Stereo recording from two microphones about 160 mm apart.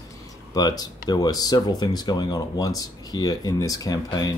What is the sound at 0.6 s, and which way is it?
Speech, 25° left (ahead or behind).